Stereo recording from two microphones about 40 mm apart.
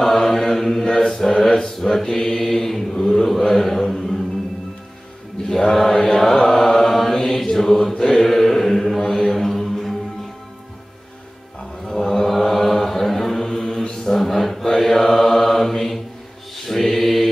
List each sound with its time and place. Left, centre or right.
0.0 s chant: centre
1.5 s mantra: centre
5.7 s chant: centre
7.9 s mantra: centre
11.9 s mantra: centre